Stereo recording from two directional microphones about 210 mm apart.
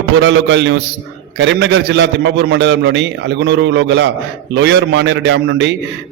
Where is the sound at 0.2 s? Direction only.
60° right (ahead or behind).